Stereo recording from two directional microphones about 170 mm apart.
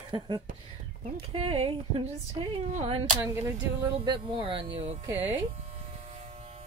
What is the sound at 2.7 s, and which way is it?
Speech, 40° right (ahead or behind).